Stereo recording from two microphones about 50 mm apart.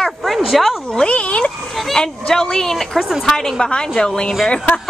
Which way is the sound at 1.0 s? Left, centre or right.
Left.